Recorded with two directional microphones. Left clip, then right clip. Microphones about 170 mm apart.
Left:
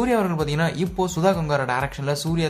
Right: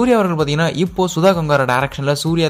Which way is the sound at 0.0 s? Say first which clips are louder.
Right 7 dB; 35° right (ahead or behind).